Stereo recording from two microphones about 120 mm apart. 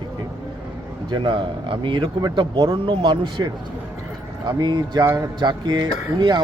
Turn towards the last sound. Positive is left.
turn(degrees=-40)  # may be behind; listen again after turning